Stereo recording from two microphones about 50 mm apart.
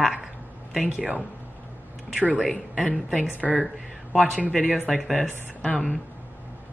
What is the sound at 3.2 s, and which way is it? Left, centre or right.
Speech, left.